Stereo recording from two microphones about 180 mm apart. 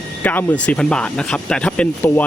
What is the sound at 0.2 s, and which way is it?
Speech, 10° left (ahead or behind).